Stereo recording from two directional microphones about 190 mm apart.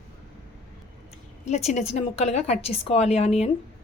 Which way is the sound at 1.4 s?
35° left (ahead or behind).